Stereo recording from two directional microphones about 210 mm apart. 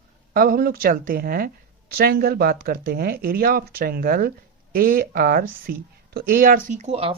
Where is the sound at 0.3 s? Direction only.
45° right (ahead or behind).